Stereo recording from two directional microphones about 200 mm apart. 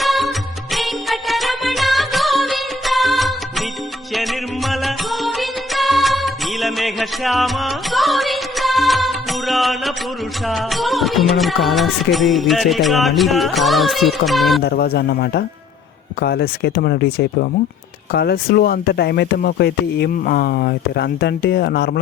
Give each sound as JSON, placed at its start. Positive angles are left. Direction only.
{"t": 0.0, "sound": "music", "side_deg": 0}
{"t": 14.6, "sound": "speech", "side_deg": 50}